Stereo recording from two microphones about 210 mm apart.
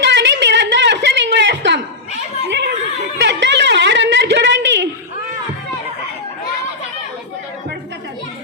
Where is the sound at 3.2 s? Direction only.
55° right (ahead or behind).